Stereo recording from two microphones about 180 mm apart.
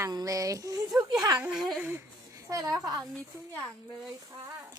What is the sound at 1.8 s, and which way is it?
Speech, 15° right (ahead or behind).